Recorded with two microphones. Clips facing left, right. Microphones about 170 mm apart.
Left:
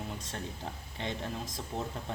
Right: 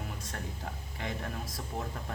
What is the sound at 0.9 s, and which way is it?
Speech, 25° left (ahead or behind).